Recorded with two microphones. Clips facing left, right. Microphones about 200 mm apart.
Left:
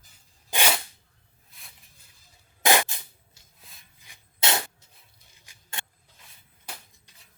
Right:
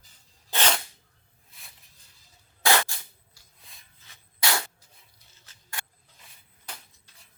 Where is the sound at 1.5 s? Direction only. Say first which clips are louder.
Even; centre (ahead or behind).